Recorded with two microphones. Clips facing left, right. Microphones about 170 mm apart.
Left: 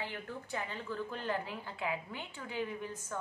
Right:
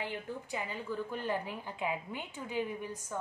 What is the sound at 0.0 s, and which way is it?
A woman's voice, 15° right (ahead or behind).